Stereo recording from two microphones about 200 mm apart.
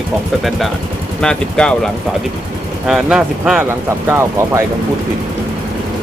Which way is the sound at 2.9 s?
5° right (ahead or behind).